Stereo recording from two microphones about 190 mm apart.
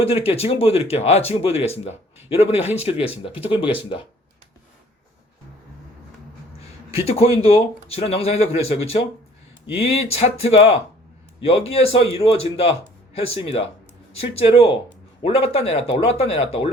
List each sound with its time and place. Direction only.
0.0 s speech: 30° left (ahead or behind)
6.6 s a sound: 30° left (ahead or behind)
7.4 s speech: 30° left (ahead or behind)